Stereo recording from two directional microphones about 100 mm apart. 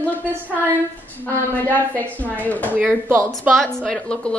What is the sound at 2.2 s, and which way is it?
Speech, 15° left (ahead or behind).